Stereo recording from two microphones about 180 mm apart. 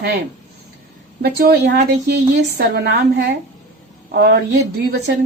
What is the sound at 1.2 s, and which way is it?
A woman's voice, 65° right (ahead or behind).